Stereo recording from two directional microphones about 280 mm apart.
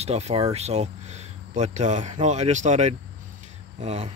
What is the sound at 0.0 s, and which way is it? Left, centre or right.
Speech, right.